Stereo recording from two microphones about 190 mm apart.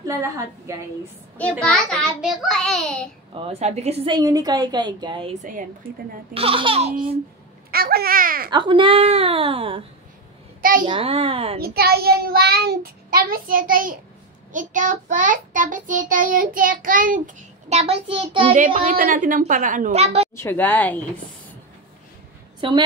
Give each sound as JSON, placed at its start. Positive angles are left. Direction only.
{"t": 0.0, "sound": "a woman's voice", "side_deg": -15}
{"t": 1.6, "sound": "a child's voice", "side_deg": 5}
{"t": 3.3, "sound": "a woman's voice", "side_deg": -35}
{"t": 5.4, "sound": "child singing", "side_deg": -45}
{"t": 6.3, "sound": "a woman's voice", "side_deg": -30}
{"t": 7.7, "sound": "a child's voice", "side_deg": -55}
{"t": 8.5, "sound": "a woman's voice", "side_deg": -25}
{"t": 10.6, "sound": "a child's voice", "side_deg": -50}
{"t": 10.9, "sound": "a child's voice", "side_deg": -30}
{"t": 11.6, "sound": "child singing", "side_deg": -55}
{"t": 18.5, "sound": "child singing", "side_deg": -45}
{"t": 20.3, "sound": "speech", "side_deg": 10}
{"t": 22.6, "sound": "a woman's voice", "side_deg": -25}